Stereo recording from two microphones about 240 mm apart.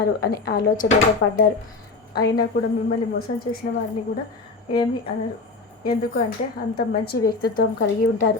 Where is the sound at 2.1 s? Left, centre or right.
Left.